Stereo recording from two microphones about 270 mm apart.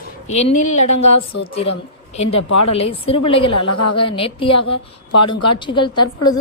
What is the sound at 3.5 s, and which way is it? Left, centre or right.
Speech, left.